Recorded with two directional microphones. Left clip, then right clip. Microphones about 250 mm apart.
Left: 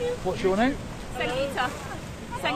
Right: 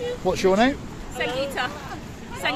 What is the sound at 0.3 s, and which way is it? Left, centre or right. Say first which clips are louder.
Speech: right 6 dB; right.